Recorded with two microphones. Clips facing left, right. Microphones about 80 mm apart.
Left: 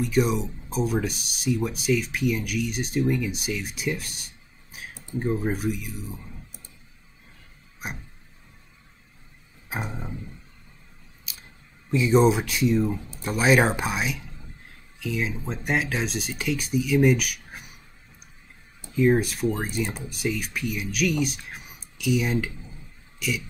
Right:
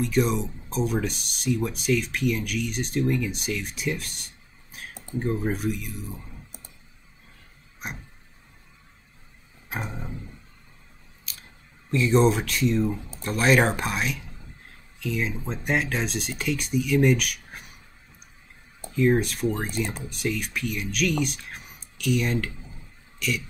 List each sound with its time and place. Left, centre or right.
0.1 s speech: centre
9.7 s speech: centre
11.9 s speech: centre
18.9 s speech: centre
23.1 s a sound: centre